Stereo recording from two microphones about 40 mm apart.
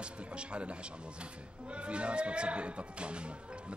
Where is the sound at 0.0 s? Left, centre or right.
Right.